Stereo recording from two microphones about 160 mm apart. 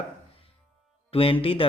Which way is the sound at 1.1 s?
35° left (ahead or behind).